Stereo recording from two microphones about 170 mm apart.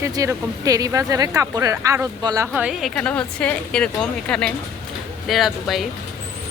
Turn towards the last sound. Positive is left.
turn(degrees=0)  # may be behind; listen again after turning